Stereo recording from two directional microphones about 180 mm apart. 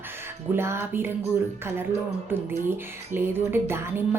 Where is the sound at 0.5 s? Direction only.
15° right (ahead or behind).